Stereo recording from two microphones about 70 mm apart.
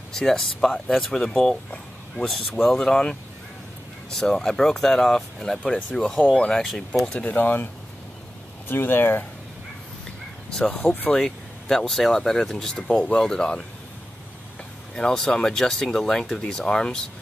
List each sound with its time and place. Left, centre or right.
0.1 s speech: centre
6.3 s speech: centre
7.2 s speech: left
10.6 s speech: left
11.1 s speech: centre
15.0 s speech: centre